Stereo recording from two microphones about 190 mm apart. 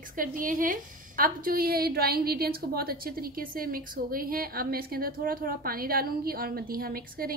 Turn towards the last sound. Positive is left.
turn(degrees=-50)  # may be behind; listen again after turning